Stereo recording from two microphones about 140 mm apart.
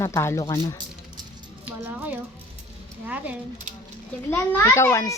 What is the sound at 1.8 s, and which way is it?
Speech, 15° right (ahead or behind).